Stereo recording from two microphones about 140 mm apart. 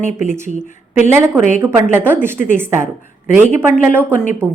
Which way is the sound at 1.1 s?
15° right (ahead or behind).